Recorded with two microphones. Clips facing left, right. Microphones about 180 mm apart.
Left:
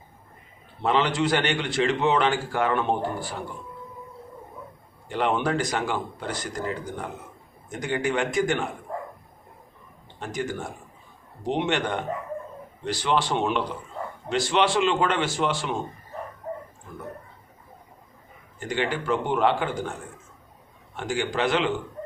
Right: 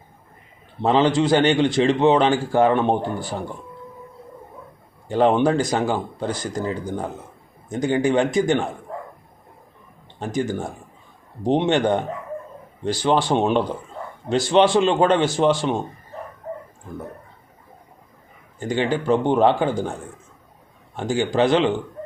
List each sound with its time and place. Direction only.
0.8 s a man's voice: 30° right (ahead or behind)
5.1 s a man's voice: 30° right (ahead or behind)
10.2 s a man's voice: 30° right (ahead or behind)
18.6 s a man's voice: 30° right (ahead or behind)